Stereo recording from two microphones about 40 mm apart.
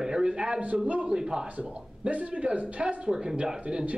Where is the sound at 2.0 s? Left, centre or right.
Right.